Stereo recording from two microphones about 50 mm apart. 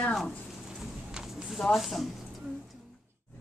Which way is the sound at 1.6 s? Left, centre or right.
Centre.